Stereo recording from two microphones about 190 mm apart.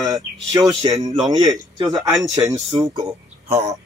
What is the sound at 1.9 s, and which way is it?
Speech, centre (ahead or behind).